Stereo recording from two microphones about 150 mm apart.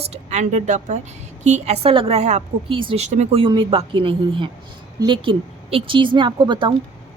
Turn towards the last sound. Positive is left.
turn(degrees=-30)  # may be behind; listen again after turning